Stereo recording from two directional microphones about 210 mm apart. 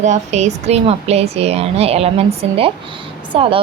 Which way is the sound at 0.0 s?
35° right (ahead or behind).